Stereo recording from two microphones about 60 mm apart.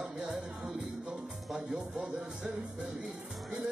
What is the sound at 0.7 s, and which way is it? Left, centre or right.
Music, centre.